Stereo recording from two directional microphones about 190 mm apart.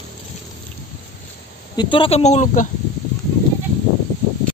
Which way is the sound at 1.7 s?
25° left (ahead or behind).